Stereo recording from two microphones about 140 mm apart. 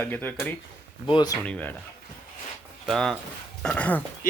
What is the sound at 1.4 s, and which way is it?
Speech, 10° left (ahead or behind).